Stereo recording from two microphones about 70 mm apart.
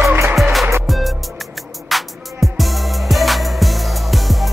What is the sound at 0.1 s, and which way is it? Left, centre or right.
Music, right.